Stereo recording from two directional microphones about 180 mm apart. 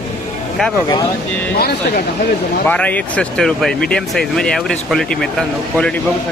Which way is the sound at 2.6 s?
10° left (ahead or behind).